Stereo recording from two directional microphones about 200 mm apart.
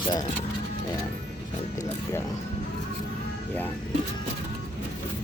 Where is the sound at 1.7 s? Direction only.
15° left (ahead or behind).